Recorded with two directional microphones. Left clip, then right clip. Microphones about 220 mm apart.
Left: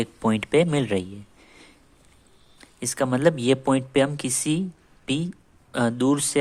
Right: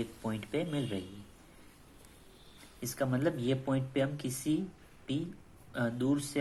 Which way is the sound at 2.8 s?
40° left (ahead or behind).